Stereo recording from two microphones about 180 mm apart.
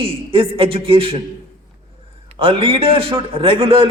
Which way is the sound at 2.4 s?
30° right (ahead or behind).